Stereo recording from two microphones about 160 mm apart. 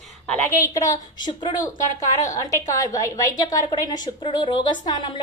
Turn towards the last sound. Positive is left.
turn(degrees=30)  # may be behind; listen again after turning